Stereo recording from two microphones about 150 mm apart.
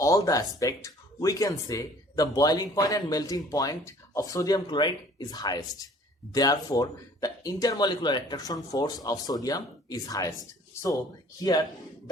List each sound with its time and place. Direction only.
0.0 s speech: 20° left (ahead or behind)
11.3 s speech: 25° left (ahead or behind)